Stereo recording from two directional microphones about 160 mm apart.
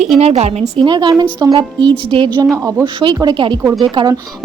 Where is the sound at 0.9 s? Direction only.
30° right (ahead or behind).